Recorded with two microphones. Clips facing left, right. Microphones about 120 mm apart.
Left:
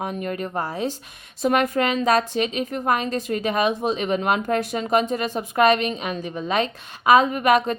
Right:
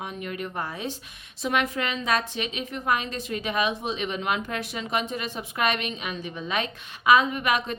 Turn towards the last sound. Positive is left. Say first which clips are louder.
# left 7 dB
turn(degrees=40)  # may be behind; listen again after turning